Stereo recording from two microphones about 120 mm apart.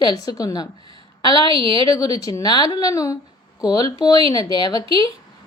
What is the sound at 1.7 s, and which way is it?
A woman's voice, 30° left (ahead or behind).